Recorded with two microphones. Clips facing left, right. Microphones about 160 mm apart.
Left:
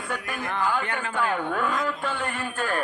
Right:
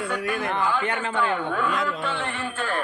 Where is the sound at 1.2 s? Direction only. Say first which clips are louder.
Right 1 dB; 40° left (ahead or behind).